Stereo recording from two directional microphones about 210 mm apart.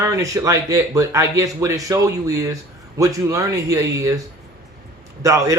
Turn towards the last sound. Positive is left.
turn(degrees=-15)  # may be behind; listen again after turning